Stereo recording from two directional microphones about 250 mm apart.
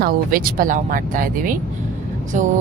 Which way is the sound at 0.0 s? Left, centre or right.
Right.